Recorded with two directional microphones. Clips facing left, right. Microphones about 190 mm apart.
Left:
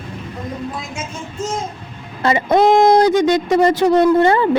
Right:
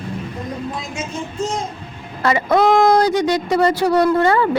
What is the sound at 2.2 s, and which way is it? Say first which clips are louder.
Speech: left 2 dB; 20° left (ahead or behind).